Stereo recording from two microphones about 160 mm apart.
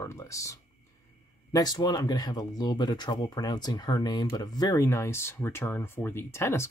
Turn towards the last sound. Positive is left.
turn(degrees=15)  # may be behind; listen again after turning